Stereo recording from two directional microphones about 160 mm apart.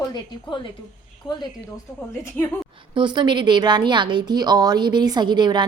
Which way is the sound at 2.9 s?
30° right (ahead or behind).